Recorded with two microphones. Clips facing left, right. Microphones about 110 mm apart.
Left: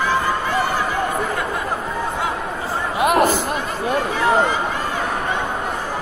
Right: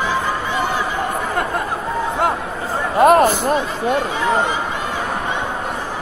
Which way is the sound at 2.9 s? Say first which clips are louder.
Right 5 dB; 40° right (ahead or behind).